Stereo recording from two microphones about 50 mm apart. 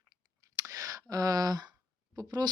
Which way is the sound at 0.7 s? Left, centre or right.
Right.